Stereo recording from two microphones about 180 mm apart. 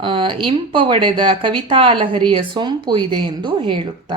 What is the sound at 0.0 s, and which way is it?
A woman's voice, 25° right (ahead or behind).